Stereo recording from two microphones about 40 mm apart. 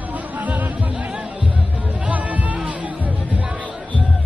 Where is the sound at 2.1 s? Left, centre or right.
Right.